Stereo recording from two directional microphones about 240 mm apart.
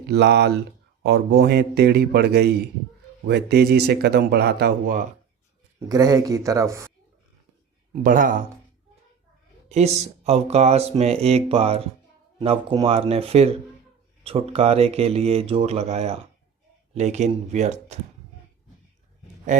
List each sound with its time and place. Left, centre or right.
0.0 s speech: right
5.9 s speech: centre
8.0 s speech: right
9.6 s speech: right